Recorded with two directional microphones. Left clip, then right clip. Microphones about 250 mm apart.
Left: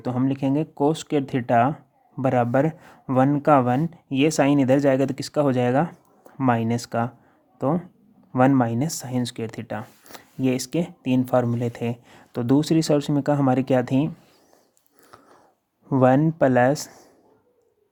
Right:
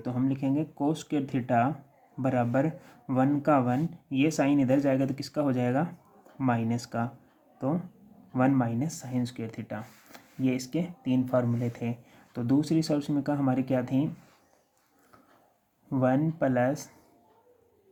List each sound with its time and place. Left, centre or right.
0.0 s speech: left
15.9 s speech: left